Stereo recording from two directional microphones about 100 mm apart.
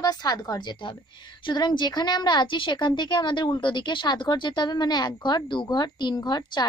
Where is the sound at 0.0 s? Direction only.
40° left (ahead or behind).